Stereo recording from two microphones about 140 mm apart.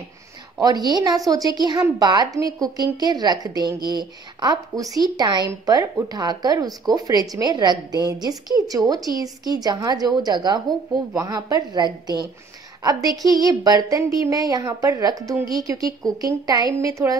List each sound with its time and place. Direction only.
0.6 s a woman's voice: 30° right (ahead or behind)